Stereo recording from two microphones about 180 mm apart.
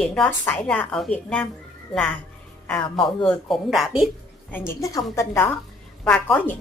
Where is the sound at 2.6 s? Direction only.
10° left (ahead or behind).